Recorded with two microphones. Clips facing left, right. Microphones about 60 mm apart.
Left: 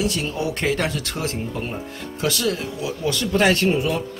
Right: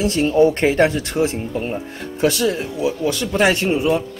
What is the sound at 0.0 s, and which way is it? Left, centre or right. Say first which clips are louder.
Speech: right 9 dB; right.